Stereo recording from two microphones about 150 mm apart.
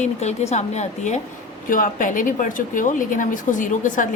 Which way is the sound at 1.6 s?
65° left (ahead or behind).